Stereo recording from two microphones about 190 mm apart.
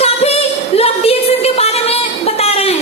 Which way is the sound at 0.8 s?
30° left (ahead or behind).